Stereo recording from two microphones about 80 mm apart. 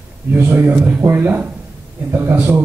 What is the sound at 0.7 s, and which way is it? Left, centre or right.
A man's voice, centre.